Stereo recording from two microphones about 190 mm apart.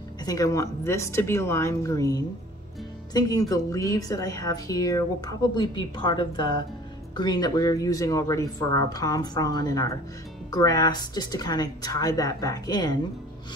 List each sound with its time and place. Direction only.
0.2 s a woman's voice: 20° left (ahead or behind)